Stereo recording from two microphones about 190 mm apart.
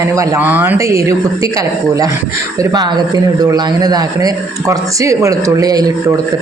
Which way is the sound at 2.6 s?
20° right (ahead or behind).